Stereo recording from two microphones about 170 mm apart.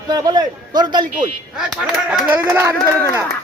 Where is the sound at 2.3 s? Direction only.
15° right (ahead or behind).